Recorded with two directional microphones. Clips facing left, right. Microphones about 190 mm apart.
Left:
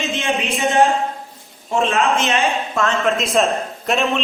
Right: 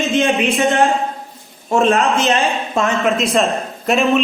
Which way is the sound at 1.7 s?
40° right (ahead or behind).